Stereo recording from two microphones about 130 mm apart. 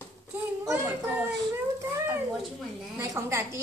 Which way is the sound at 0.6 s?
15° right (ahead or behind).